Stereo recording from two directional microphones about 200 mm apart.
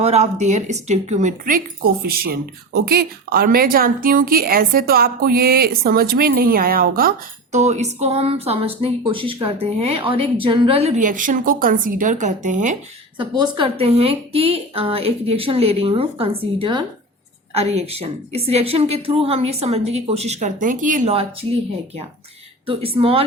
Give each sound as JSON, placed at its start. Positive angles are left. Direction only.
{"t": 0.0, "sound": "speech", "side_deg": -35}
{"t": 7.5, "sound": "speech", "side_deg": -35}
{"t": 13.1, "sound": "a woman's voice", "side_deg": -25}
{"t": 22.6, "sound": "a woman's voice", "side_deg": -25}